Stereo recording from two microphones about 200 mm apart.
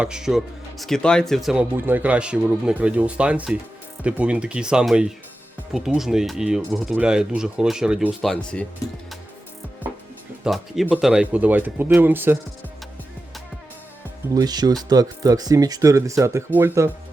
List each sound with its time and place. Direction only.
0.0 s a man's voice: 5° right (ahead or behind)
10.4 s speech: centre (ahead or behind)
14.3 s speech: 20° right (ahead or behind)